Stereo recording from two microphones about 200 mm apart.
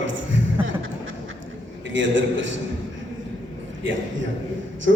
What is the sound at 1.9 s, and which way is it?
Speech, 70° right (ahead or behind).